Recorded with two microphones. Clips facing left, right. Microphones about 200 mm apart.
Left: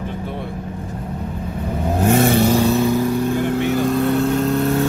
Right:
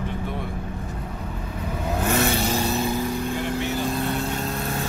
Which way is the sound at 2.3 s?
55° left (ahead or behind).